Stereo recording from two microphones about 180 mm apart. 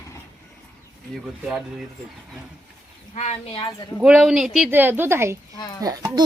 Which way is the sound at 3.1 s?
35° left (ahead or behind).